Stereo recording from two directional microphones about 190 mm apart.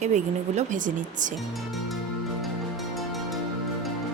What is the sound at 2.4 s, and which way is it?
Music, centre (ahead or behind).